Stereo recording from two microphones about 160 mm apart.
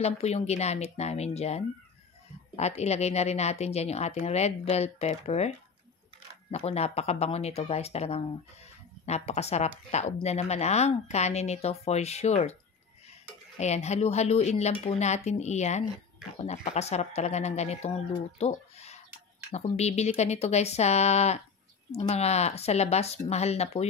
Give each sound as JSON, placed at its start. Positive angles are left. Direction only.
{"t": 0.0, "sound": "speech", "side_deg": 45}
{"t": 6.5, "sound": "speech", "side_deg": 40}
{"t": 13.6, "sound": "speech", "side_deg": 45}